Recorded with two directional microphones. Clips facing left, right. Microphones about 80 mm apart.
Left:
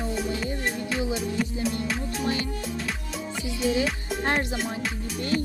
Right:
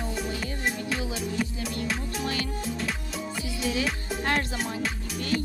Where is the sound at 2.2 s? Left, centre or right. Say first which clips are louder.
Left 4 dB; left.